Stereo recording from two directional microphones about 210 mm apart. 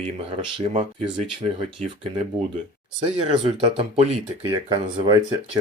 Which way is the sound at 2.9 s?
25° right (ahead or behind).